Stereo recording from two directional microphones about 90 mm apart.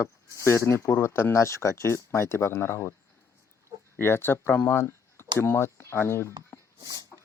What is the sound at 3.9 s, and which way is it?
Speech, 25° left (ahead or behind).